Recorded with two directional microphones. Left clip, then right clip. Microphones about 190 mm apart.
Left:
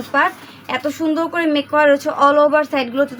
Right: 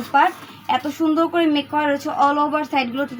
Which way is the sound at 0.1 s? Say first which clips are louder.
Even; 45° left (ahead or behind).